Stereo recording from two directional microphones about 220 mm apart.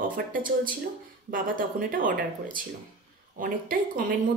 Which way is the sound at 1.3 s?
40° right (ahead or behind).